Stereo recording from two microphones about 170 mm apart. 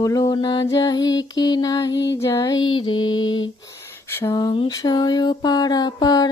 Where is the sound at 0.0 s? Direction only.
20° left (ahead or behind).